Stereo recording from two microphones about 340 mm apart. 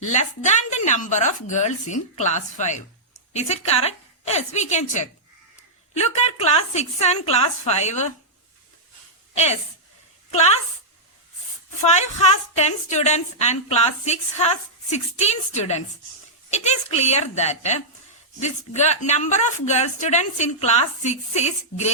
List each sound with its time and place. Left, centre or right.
0.1 s a woman's voice: left
9.3 s a woman's voice: centre
11.8 s a woman's voice: centre